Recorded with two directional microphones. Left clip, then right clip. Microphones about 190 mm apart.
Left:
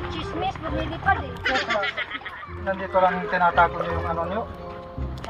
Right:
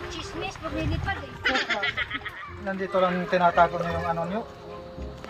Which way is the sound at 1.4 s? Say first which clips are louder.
Right 3 dB; centre (ahead or behind).